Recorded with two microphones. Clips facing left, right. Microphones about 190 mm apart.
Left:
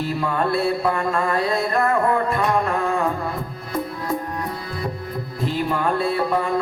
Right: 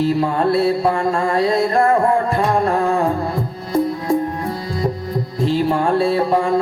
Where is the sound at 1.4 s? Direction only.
25° right (ahead or behind).